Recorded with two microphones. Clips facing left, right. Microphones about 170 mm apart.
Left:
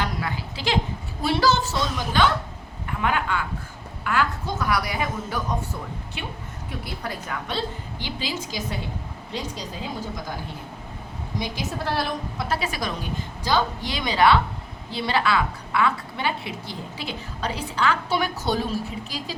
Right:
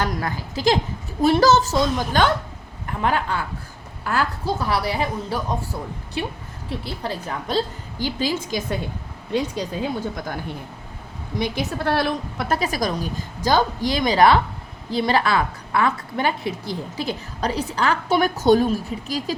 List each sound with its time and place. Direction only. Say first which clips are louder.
0.0 s a woman's voice: right 3 dB; 45° right (ahead or behind)
11.3 s a woman's voice: right 5 dB; 60° right (ahead or behind)
12.5 s a woman's voice: right 8 dB; 40° right (ahead or behind)